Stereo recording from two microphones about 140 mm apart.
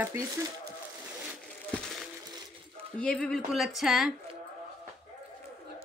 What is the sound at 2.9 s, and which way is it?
A woman's voice, 5° left (ahead or behind).